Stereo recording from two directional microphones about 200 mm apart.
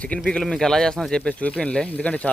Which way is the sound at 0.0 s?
5° left (ahead or behind).